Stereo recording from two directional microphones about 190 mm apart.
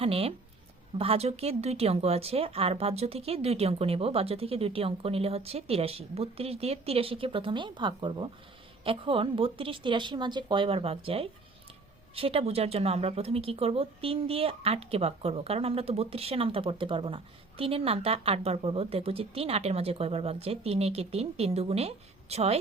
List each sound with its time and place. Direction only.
0.0 s a woman's voice: 30° right (ahead or behind)